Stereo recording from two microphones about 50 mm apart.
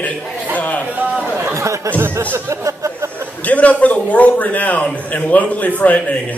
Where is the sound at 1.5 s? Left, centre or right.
Right.